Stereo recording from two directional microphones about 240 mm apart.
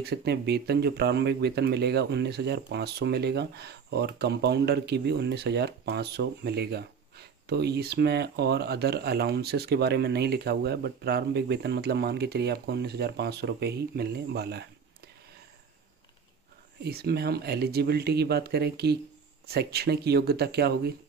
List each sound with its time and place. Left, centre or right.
0.0 s speech: right
16.8 s speech: right